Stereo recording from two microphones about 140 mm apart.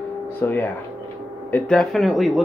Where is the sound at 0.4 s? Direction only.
15° left (ahead or behind).